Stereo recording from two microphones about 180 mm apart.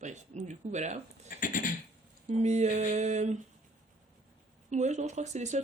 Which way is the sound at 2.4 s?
40° right (ahead or behind).